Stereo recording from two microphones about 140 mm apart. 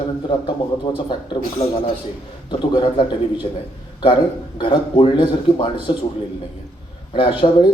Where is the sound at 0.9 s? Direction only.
30° left (ahead or behind).